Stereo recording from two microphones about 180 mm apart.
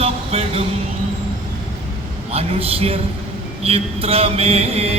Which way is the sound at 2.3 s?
35° right (ahead or behind).